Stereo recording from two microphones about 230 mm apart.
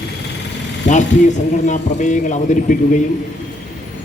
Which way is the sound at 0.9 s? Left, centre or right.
Left.